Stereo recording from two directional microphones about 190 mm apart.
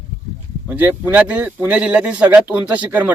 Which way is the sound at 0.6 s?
10° right (ahead or behind).